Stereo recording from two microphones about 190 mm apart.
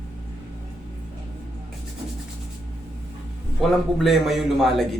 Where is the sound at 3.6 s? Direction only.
Centre (ahead or behind).